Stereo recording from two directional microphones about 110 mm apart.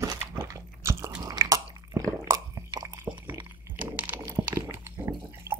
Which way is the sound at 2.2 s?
35° right (ahead or behind).